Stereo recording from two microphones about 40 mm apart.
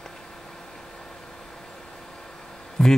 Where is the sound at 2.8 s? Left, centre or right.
Centre.